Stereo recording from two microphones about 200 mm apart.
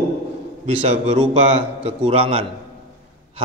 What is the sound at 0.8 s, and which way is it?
A man's voice, 35° right (ahead or behind).